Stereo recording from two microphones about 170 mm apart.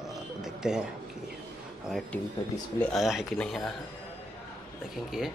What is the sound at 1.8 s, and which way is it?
Speech, centre (ahead or behind).